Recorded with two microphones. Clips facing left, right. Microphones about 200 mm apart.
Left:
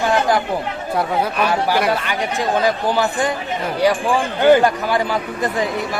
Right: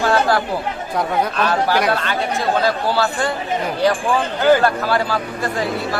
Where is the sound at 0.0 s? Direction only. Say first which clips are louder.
Even; 15° left (ahead or behind).